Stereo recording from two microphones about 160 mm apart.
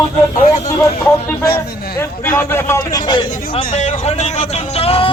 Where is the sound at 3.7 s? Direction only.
45° left (ahead or behind).